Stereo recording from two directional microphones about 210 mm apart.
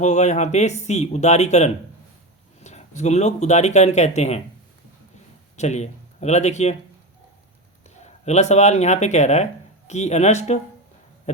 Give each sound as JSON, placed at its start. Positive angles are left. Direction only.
{"t": 0.0, "sound": "speech", "side_deg": 35}
{"t": 5.5, "sound": "speech", "side_deg": 35}
{"t": 7.9, "sound": "speech", "side_deg": 30}